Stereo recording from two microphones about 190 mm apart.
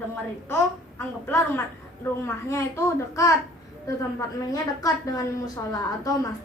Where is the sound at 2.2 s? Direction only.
15° left (ahead or behind).